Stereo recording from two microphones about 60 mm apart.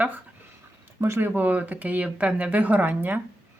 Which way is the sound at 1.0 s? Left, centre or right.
Right.